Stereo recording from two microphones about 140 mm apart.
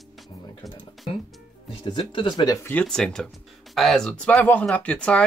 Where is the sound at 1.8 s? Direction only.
35° left (ahead or behind).